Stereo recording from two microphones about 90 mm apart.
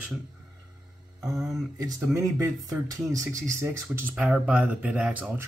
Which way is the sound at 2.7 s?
40° right (ahead or behind).